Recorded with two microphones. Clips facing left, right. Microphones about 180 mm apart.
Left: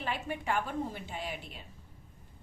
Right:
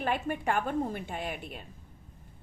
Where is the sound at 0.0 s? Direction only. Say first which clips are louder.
Right 5 dB; 55° right (ahead or behind).